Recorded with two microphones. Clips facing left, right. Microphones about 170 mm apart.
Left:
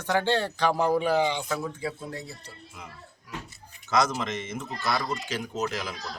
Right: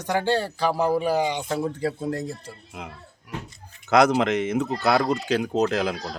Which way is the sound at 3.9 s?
65° right (ahead or behind).